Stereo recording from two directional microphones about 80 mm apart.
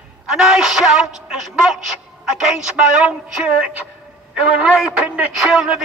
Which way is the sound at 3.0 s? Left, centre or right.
Centre.